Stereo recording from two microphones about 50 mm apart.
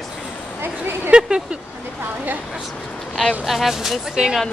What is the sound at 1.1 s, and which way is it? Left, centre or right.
Speech, centre.